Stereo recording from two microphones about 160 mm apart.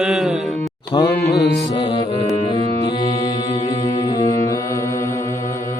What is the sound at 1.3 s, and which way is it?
Music, 90° left.